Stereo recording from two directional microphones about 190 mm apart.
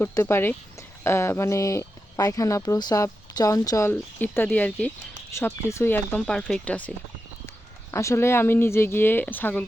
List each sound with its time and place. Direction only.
0.0 s speech: 15° left (ahead or behind)